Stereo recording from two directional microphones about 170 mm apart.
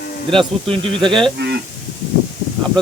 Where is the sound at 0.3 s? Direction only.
30° right (ahead or behind).